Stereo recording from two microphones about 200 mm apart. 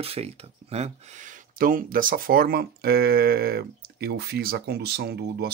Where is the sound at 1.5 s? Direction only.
45° right (ahead or behind).